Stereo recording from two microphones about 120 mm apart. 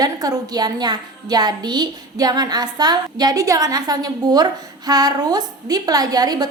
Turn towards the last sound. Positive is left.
turn(degrees=-35)  # may be behind; listen again after turning